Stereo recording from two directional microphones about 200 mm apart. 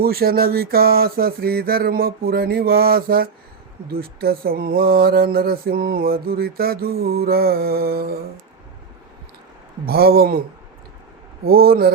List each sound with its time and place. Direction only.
0.0 s mantra: 50° right (ahead or behind)
9.8 s mantra: 50° right (ahead or behind)
11.4 s mantra: 50° right (ahead or behind)